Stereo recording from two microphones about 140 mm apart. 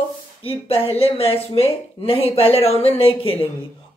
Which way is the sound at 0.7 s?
45° left (ahead or behind).